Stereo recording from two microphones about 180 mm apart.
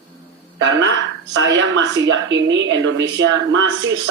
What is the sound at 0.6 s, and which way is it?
A woman's voice, 90° right.